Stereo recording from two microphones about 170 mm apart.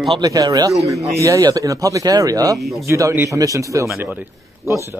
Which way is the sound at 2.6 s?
Centre (ahead or behind).